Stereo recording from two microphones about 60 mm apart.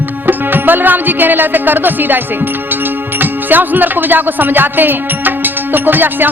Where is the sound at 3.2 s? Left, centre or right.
Right.